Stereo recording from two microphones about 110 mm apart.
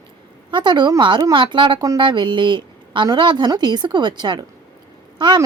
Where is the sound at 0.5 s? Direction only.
45° right (ahead or behind).